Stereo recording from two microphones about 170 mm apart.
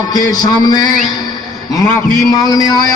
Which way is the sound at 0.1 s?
20° left (ahead or behind).